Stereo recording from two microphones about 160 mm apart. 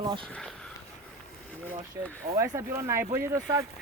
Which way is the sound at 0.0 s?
35° right (ahead or behind).